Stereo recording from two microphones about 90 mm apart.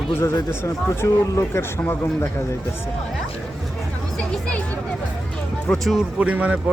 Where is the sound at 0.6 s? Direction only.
35° left (ahead or behind).